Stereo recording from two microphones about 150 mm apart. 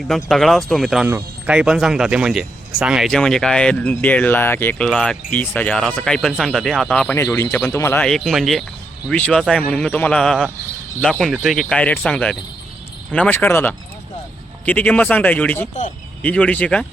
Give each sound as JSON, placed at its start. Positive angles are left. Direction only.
{"t": 0.1, "sound": "speech", "side_deg": 0}
{"t": 7.2, "sound": "a man's voice", "side_deg": 20}
{"t": 8.0, "sound": "a man's voice", "side_deg": 5}